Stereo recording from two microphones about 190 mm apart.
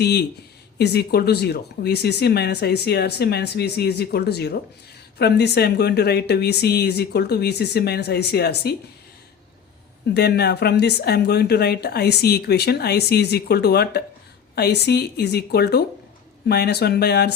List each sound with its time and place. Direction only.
0.0 s speech: 60° left (ahead or behind)
10.2 s speech: 60° left (ahead or behind)